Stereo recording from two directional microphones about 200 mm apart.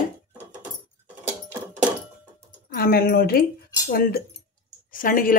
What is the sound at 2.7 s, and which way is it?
Speech, 50° left (ahead or behind).